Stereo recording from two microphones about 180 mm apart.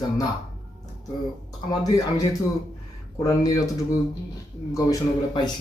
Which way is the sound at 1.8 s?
20° left (ahead or behind).